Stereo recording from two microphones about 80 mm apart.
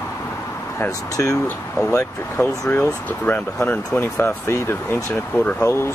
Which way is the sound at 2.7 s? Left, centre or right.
Left.